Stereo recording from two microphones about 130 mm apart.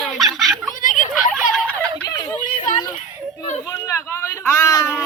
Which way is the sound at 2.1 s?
30° left (ahead or behind).